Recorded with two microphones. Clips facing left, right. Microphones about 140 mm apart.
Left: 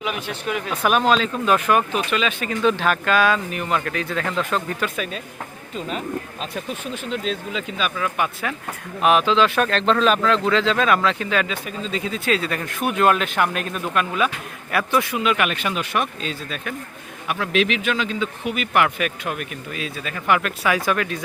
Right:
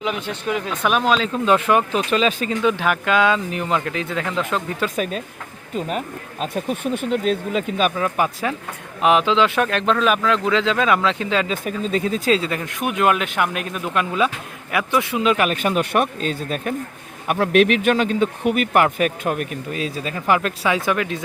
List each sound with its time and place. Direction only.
0.7 s speech: 5° left (ahead or behind)
1.2 s speech: 25° right (ahead or behind)
2.6 s speech: 15° right (ahead or behind)
6.4 s speech: 50° right (ahead or behind)
7.9 s speech: 35° right (ahead or behind)
9.0 s speech: 20° right (ahead or behind)
11.5 s speech: 50° right (ahead or behind)
12.3 s speech: 20° right (ahead or behind)